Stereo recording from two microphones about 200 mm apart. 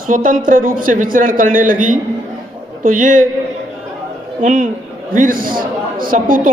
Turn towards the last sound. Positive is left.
turn(degrees=-45)  # may be behind; listen again after turning